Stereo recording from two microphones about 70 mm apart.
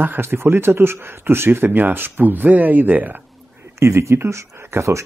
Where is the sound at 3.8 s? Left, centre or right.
Right.